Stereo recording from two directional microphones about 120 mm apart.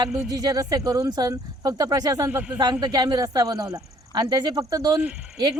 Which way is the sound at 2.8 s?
35° right (ahead or behind).